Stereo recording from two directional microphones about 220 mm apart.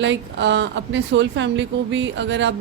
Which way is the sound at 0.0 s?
55° right (ahead or behind).